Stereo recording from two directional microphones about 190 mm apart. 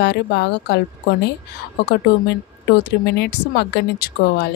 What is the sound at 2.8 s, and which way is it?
Speech, 60° left (ahead or behind).